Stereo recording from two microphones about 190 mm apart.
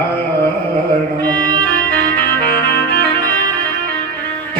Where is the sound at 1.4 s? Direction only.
20° right (ahead or behind).